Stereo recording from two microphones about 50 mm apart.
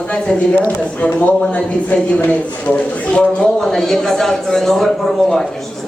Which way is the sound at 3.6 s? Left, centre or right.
Centre.